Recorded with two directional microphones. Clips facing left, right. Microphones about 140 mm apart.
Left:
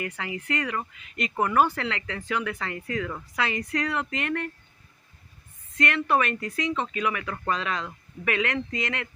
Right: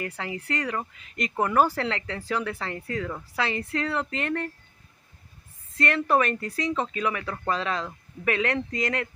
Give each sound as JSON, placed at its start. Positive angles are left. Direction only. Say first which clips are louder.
{"t": 0.0, "sound": "speech", "louder": "even", "side_deg": -35}
{"t": 5.7, "sound": "speech", "louder": "right 1 dB", "side_deg": -35}